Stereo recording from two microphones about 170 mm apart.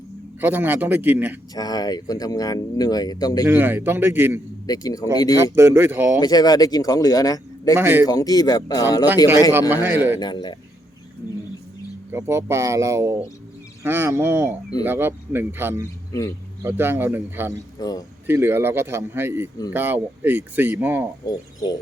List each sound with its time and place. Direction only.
0.4 s speech: 10° right (ahead or behind)
1.5 s speech: 25° left (ahead or behind)
3.4 s speech: 10° right (ahead or behind)
4.6 s speech: 20° left (ahead or behind)
5.5 s speech: 15° right (ahead or behind)
6.1 s speech: 25° left (ahead or behind)
7.8 s speech: 10° right (ahead or behind)
8.0 s speech: 20° left (ahead or behind)
9.5 s speech: 10° right (ahead or behind)
10.2 s speech: 25° left (ahead or behind)
12.1 s speech: 15° right (ahead or behind)
17.7 s a man's voice: 20° left (ahead or behind)
18.3 s speech: 15° right (ahead or behind)
21.6 s speech: 25° left (ahead or behind)